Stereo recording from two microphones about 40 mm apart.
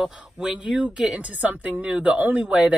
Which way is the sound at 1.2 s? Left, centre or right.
Right.